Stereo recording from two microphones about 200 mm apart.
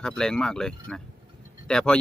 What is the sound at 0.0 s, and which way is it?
Speech, 5° left (ahead or behind).